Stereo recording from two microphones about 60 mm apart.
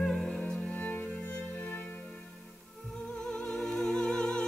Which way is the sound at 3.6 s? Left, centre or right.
Centre.